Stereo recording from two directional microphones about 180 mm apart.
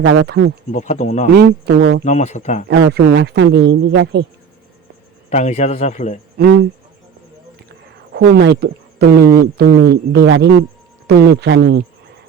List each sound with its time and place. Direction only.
0.0 s speech: 85° right
0.7 s speech: 45° left (ahead or behind)
1.4 s speech: 65° right (ahead or behind)
2.0 s speech: 40° left (ahead or behind)
2.6 s speech: 65° right (ahead or behind)
5.3 s speech: 40° left (ahead or behind)
6.4 s speech: 65° right (ahead or behind)
8.1 s speech: 70° right (ahead or behind)
11.0 s speech: 65° right (ahead or behind)